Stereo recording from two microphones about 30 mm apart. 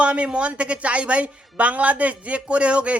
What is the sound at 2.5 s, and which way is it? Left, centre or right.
Speech, right.